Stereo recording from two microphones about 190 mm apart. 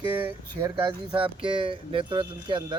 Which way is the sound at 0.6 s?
20° right (ahead or behind).